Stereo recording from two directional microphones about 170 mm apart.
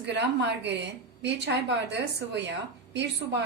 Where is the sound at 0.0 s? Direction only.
90° right.